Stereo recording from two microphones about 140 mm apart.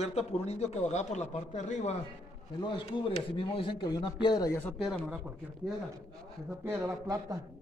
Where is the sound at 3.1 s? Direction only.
45° left (ahead or behind).